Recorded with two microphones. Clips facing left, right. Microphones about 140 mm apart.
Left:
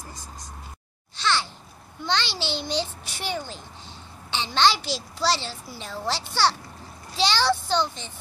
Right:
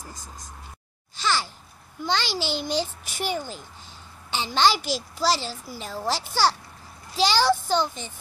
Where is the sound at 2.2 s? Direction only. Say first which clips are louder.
Right 2 dB; 45° right (ahead or behind).